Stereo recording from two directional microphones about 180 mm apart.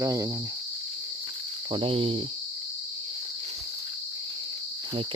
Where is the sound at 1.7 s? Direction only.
30° right (ahead or behind).